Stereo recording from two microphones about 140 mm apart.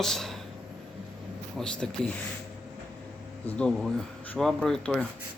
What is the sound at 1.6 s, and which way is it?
Speech, 5° left (ahead or behind).